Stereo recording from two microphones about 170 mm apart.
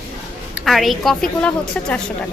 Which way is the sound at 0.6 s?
Centre (ahead or behind).